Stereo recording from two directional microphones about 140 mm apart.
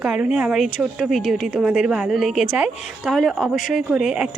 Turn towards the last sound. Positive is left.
turn(degrees=-5)  # may be behind; listen again after turning